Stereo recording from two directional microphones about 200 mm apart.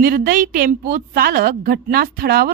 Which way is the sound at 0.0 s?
45° right (ahead or behind).